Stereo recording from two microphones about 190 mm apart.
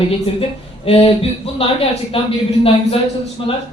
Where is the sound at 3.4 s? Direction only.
30° left (ahead or behind).